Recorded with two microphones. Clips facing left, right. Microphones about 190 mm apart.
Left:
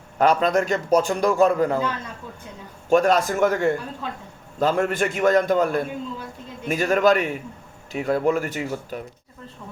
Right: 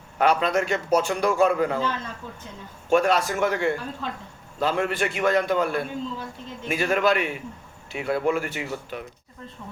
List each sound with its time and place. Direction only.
0.2 s a man's voice: 40° left (ahead or behind)
2.9 s a man's voice: 40° left (ahead or behind)